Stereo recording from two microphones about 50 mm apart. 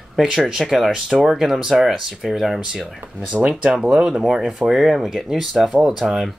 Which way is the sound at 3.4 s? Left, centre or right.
Centre.